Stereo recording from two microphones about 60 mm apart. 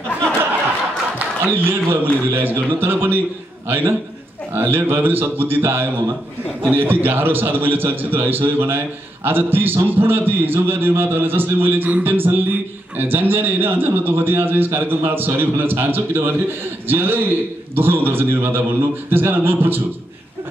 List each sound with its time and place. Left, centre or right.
1.5 s a man's voice: right